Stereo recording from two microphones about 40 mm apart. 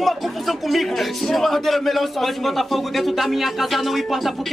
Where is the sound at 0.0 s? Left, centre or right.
Centre.